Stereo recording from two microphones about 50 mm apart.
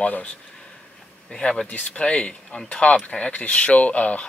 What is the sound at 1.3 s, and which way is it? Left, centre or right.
Speech, centre.